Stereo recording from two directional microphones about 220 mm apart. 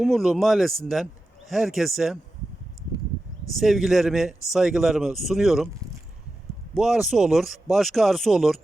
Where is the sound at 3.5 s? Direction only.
Centre (ahead or behind).